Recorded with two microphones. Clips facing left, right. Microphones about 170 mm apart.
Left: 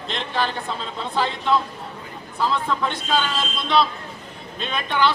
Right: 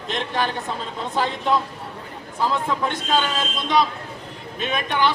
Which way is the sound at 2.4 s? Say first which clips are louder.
Even; 10° right (ahead or behind).